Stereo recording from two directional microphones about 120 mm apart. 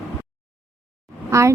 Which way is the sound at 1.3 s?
25° right (ahead or behind).